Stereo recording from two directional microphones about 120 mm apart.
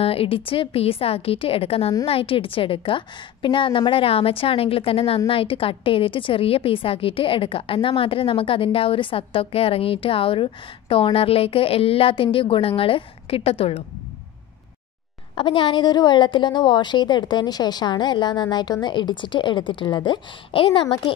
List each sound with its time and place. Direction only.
0.0 s a woman's voice: 55° left (ahead or behind)
15.3 s a woman's voice: 45° left (ahead or behind)